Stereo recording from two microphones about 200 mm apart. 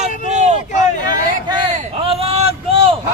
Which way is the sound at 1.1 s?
20° right (ahead or behind).